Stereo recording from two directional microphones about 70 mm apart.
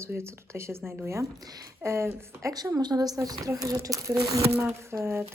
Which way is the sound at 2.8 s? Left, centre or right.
Right.